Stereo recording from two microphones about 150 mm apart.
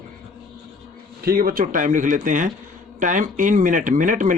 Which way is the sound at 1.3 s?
80° right.